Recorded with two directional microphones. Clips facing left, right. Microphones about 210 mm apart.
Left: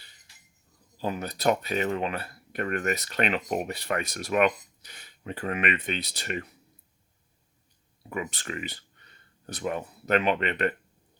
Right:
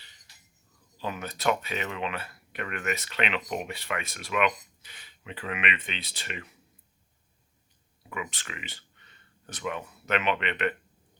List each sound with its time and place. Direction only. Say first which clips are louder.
0.9 s speech: left 4 dB; 40° left (ahead or behind)
8.1 s speech: left 5 dB; 40° left (ahead or behind)